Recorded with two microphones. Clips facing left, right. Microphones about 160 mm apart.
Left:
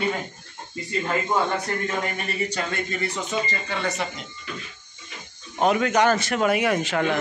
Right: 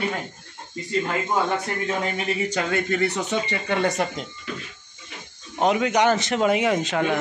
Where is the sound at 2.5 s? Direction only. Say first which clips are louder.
Right 5 dB; 65° right (ahead or behind).